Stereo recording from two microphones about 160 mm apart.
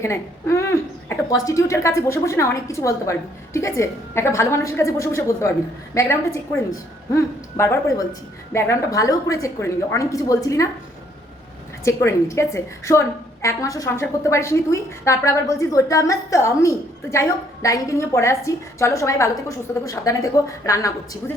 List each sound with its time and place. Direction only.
0.0 s a woman's voice: 15° left (ahead or behind)
11.9 s a woman's voice: 20° left (ahead or behind)